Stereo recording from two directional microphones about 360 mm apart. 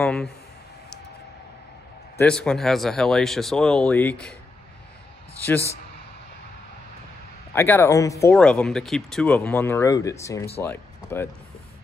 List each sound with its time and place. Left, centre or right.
0.0 s a sound: centre
2.1 s speech: centre
7.5 s speech: centre